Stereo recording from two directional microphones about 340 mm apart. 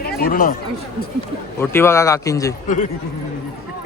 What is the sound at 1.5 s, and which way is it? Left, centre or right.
A man's voice, centre.